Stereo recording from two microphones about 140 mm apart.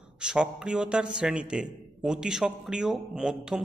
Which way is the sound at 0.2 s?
5° right (ahead or behind).